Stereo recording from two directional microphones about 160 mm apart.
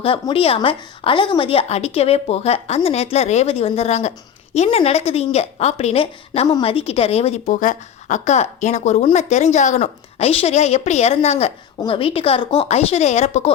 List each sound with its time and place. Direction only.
0.0 s a woman's voice: 35° left (ahead or behind)